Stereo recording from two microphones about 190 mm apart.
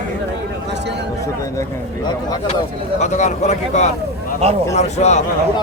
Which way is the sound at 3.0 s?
35° left (ahead or behind).